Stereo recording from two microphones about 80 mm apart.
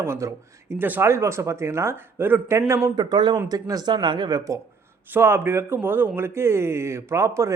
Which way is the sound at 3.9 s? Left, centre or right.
Right.